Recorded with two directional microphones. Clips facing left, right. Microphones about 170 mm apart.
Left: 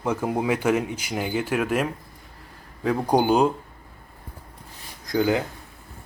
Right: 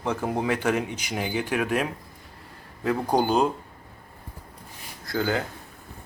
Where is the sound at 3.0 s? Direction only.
10° left (ahead or behind).